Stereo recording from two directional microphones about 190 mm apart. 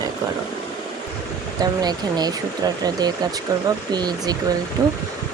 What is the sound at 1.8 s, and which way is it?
Speech, 20° right (ahead or behind).